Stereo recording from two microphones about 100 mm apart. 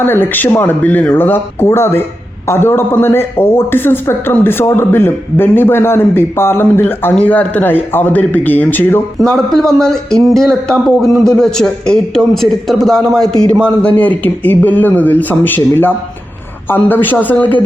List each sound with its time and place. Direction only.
0.0 s speech: 20° left (ahead or behind)
9.1 s a man's voice: 5° left (ahead or behind)